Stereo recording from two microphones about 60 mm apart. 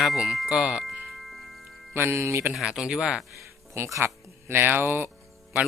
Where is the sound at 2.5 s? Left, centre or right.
Centre.